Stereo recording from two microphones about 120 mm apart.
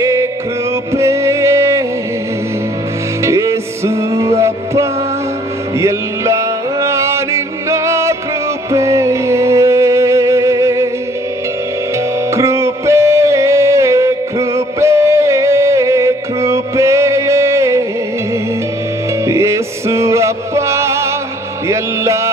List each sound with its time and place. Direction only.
0.0 s music: 30° right (ahead or behind)
3.3 s music: 25° right (ahead or behind)
12.3 s music: 25° right (ahead or behind)
19.2 s music: 25° right (ahead or behind)
21.6 s mantra: 25° right (ahead or behind)